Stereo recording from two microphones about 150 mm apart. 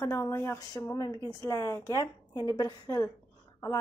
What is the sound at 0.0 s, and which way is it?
Speech, 20° left (ahead or behind).